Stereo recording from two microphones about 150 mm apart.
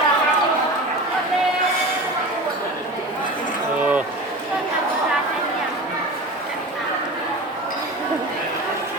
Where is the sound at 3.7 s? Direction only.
10° right (ahead or behind).